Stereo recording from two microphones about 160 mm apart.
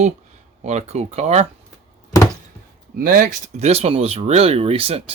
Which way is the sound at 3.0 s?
60° right (ahead or behind).